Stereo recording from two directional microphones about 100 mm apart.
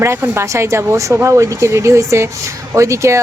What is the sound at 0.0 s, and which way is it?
Speech, 25° right (ahead or behind).